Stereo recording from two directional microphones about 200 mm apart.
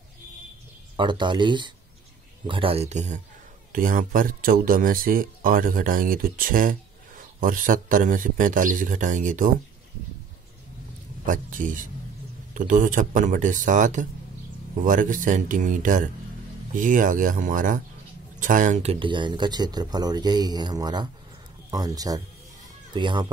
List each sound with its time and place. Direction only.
0.9 s speech: 25° right (ahead or behind); by 9.5 s 40° right (ahead or behind)
11.2 s speech: 40° right (ahead or behind); by 23.3 s 25° right (ahead or behind)